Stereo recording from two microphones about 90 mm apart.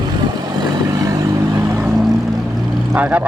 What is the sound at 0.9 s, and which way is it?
Vehicle, 40° right (ahead or behind).